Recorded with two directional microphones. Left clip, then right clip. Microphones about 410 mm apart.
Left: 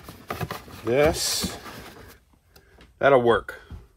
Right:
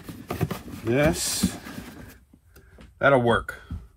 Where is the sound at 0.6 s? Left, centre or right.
Left.